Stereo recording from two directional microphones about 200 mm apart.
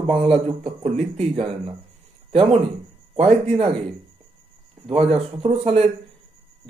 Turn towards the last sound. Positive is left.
turn(degrees=-30)  # may be behind; listen again after turning